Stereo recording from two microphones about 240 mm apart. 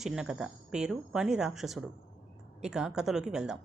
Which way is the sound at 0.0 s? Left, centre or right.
Centre.